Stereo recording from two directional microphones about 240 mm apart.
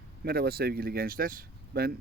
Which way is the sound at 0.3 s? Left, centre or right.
Right.